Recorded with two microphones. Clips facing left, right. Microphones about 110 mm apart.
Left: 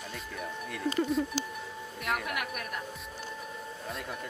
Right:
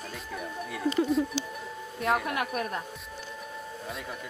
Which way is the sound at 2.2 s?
30° right (ahead or behind).